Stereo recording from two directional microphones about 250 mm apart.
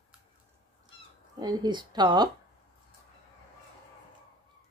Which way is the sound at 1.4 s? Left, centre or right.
Centre.